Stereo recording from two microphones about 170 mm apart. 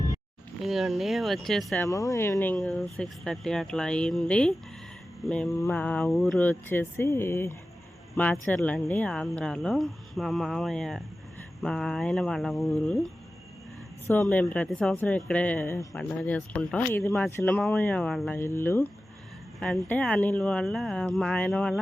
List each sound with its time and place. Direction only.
0.6 s speech: centre (ahead or behind)
1.8 s speech: 20° left (ahead or behind)
2.6 s speech: centre (ahead or behind)
14.1 s speech: 10° left (ahead or behind)